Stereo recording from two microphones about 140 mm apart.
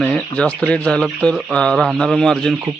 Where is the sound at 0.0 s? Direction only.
10° left (ahead or behind).